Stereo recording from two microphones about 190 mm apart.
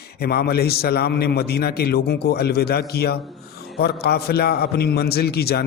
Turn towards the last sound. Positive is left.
turn(degrees=55)  # may be behind; listen again after turning